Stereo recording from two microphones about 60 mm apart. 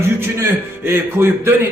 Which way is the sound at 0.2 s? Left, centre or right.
Right.